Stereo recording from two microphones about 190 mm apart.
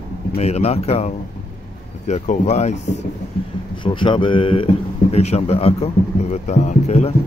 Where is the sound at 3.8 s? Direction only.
25° left (ahead or behind).